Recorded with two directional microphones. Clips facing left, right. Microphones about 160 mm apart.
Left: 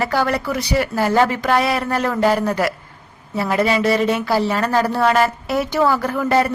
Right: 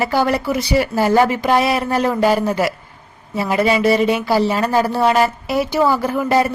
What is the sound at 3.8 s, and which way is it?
A woman's voice, 10° right (ahead or behind).